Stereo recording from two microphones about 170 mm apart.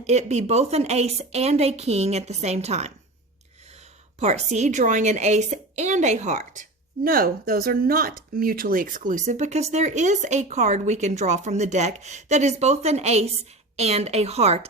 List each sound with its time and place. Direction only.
0.0 s a woman's voice: 40° right (ahead or behind)
4.2 s speech: 40° right (ahead or behind)